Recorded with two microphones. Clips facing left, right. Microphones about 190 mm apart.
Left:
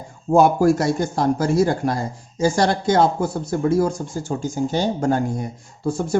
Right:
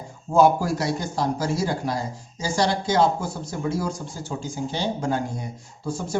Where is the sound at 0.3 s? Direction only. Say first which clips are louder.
Left 4 dB; 55° left (ahead or behind).